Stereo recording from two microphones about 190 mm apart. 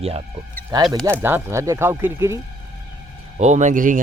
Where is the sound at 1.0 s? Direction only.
10° right (ahead or behind).